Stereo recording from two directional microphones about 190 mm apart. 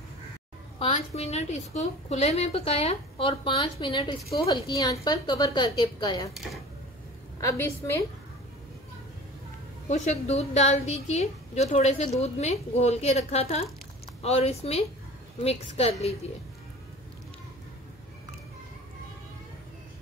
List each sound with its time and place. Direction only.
0.7 s a woman's voice: 30° left (ahead or behind)
7.3 s a woman's voice: 15° left (ahead or behind)
9.8 s a woman's voice: 35° left (ahead or behind)